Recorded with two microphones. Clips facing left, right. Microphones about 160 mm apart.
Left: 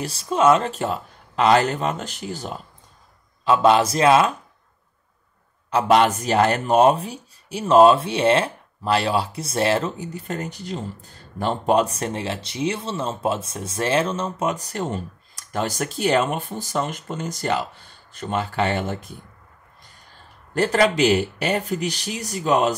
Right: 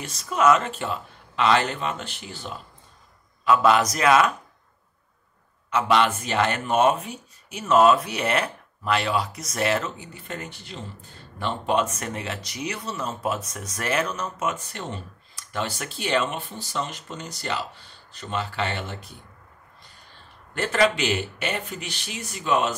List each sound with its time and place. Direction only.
0.0 s speech: 30° left (ahead or behind)
3.4 s a man's voice: 30° left (ahead or behind)
5.7 s speech: 40° left (ahead or behind)
20.5 s speech: 40° left (ahead or behind)